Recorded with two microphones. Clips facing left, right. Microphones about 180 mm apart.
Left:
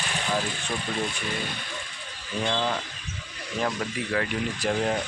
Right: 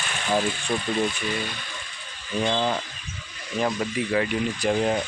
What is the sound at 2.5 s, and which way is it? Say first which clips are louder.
Speech: right 2 dB; 15° right (ahead or behind).